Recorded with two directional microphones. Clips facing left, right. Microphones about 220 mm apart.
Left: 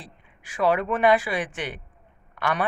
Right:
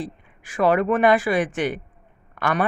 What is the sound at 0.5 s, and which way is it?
Speech, 50° right (ahead or behind).